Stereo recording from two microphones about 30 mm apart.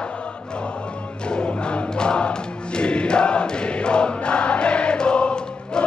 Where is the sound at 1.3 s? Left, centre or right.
Left.